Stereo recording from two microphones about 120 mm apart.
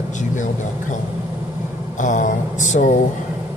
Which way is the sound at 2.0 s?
90° left.